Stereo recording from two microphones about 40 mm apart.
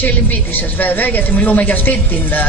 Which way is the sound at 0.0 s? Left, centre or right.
Left.